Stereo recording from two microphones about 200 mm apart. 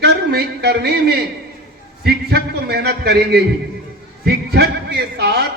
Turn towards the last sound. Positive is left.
turn(degrees=-55)  # may be behind; listen again after turning